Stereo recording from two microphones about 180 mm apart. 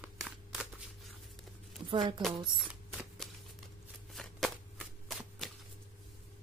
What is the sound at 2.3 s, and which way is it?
Speech, 25° right (ahead or behind).